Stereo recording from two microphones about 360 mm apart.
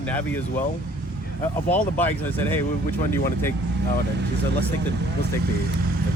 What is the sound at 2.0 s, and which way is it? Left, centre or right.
Speech, centre.